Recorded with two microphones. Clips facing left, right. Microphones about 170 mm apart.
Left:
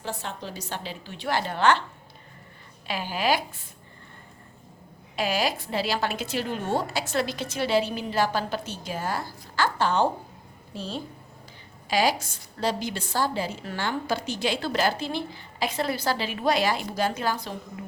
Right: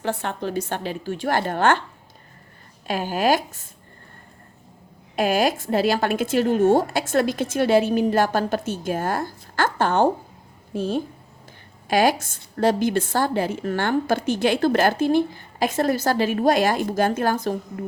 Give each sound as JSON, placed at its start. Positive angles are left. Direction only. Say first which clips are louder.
{"t": 0.0, "sound": "a woman's voice", "louder": "right 8 dB", "side_deg": -60}
{"t": 2.8, "sound": "a woman's voice", "louder": "right 6 dB", "side_deg": -45}
{"t": 5.1, "sound": "a woman's voice", "louder": "right 6 dB", "side_deg": -50}